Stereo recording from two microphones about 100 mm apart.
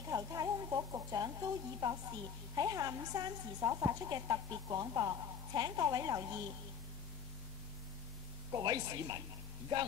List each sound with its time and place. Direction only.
0.1 s a sound: 35° right (ahead or behind)
2.5 s a woman's voice: 35° right (ahead or behind)
8.5 s a woman's voice: 40° right (ahead or behind)